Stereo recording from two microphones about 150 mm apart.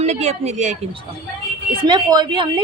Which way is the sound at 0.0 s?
50° right (ahead or behind).